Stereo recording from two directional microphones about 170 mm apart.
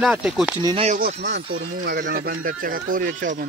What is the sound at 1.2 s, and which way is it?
Speech, 90° right.